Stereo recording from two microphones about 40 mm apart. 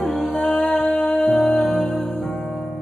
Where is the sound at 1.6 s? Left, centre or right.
Centre.